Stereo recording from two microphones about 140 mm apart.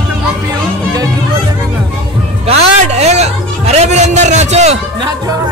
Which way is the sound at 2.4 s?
50° right (ahead or behind).